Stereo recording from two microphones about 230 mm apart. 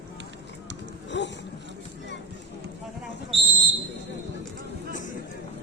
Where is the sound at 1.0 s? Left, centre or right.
Left.